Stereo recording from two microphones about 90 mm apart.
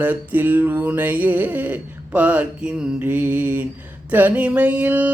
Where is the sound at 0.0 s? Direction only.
20° right (ahead or behind).